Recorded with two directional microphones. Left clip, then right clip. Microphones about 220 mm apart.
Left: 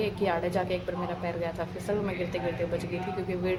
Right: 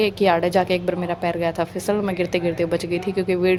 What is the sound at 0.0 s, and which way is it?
A woman's voice, 40° right (ahead or behind).